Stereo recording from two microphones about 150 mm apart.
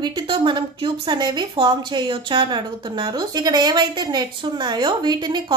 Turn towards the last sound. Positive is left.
turn(degrees=-30)  # may be behind; listen again after turning